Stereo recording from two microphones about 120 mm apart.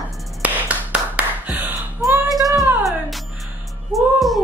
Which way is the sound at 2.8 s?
Centre (ahead or behind).